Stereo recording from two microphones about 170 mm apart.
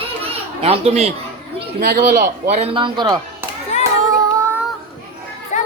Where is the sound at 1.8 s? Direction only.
65° right (ahead or behind).